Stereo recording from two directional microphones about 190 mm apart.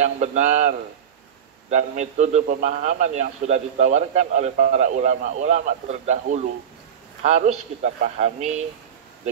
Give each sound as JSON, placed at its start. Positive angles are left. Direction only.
{"t": 0.0, "sound": "a man's voice", "side_deg": -40}